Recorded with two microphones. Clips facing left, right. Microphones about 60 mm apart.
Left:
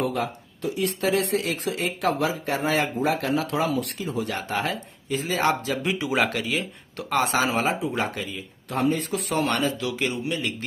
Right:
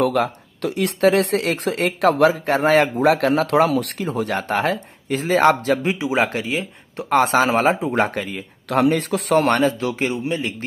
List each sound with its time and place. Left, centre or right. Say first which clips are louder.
0.0 s speech: right 7 dB; right
3.1 s speech: right 8 dB; right
5.9 s speech: right 4 dB; right
7.4 s speech: right 6 dB; right
8.6 s speech: right 6 dB; right
9.3 s speech: right 8 dB; right